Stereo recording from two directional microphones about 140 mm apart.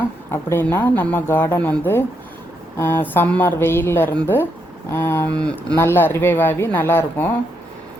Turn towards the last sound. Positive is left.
turn(degrees=15)  # may be behind; listen again after turning